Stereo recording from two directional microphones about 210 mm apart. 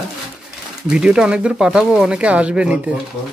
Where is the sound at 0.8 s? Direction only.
5° right (ahead or behind).